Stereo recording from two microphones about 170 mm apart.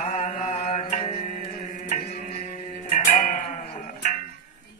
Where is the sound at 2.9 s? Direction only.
45° left (ahead or behind).